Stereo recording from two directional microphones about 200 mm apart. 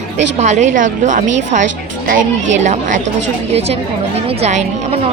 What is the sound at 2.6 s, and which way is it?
Speech, 35° right (ahead or behind).